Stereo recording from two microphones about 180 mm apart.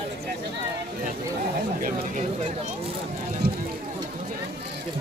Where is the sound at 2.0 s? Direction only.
35° right (ahead or behind).